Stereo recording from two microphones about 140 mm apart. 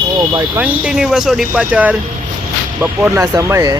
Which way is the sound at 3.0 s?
20° right (ahead or behind).